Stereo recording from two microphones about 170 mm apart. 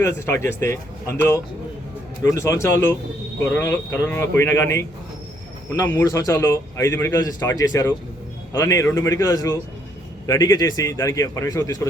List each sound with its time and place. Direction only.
0.0 s a man's voice: 15° left (ahead or behind)